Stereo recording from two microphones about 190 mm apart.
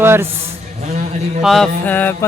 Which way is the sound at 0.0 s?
10° right (ahead or behind).